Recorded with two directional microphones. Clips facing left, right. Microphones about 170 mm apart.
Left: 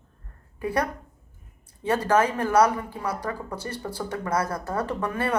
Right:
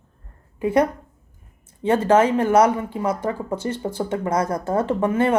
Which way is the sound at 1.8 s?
25° right (ahead or behind).